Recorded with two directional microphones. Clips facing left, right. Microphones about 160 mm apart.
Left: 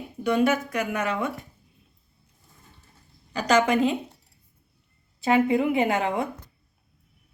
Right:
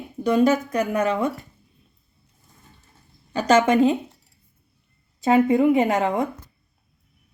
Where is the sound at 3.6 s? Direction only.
40° right (ahead or behind).